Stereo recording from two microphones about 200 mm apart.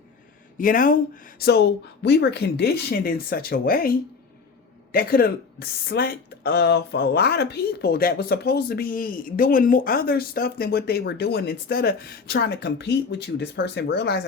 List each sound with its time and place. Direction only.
0.6 s speech: 40° left (ahead or behind)